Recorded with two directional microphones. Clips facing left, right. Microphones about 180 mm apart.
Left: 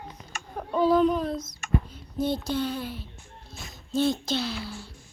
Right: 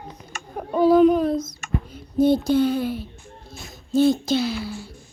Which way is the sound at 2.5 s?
10° right (ahead or behind).